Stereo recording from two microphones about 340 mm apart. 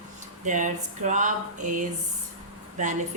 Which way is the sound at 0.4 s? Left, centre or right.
Right.